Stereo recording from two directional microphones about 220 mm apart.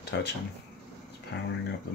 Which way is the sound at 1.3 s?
50° left (ahead or behind).